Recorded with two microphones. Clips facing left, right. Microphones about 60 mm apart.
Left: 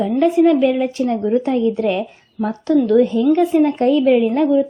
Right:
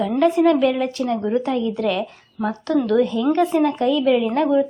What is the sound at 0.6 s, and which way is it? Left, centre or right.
Speech, left.